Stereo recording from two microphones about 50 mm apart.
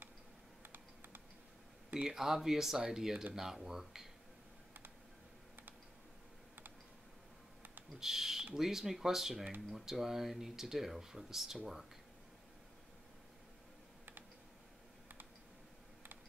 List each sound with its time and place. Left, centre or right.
0.6 s typing: right
2.0 s speech: centre
8.0 s a sound: centre
8.5 s speech: centre